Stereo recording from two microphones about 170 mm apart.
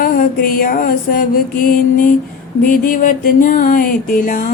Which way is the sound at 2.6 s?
55° left (ahead or behind).